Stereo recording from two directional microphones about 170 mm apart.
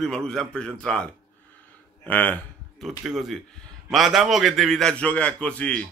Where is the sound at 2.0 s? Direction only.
10° left (ahead or behind).